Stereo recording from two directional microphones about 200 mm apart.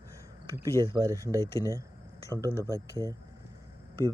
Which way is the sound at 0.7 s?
15° left (ahead or behind).